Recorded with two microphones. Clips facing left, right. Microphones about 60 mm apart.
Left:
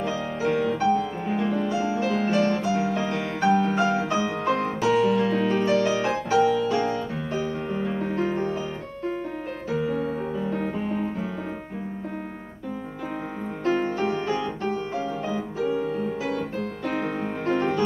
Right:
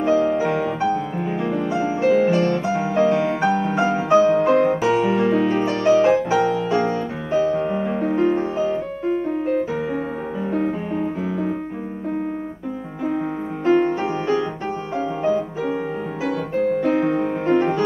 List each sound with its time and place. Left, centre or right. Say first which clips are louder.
0.0 s music: right 10 dB; right
0.5 s music: right 1 dB; centre; by 2.8 s right
3.0 s music: right 8 dB; centre
3.9 s music: right 9 dB; right
4.3 s music: right 9 dB; centre
6.0 s music: right 4 dB; centre
13.7 s music: right 6 dB; centre
16.8 s music: right 8 dB; centre